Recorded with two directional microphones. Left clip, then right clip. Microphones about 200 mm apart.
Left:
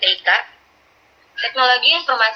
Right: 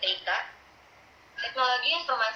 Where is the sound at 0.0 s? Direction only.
40° left (ahead or behind).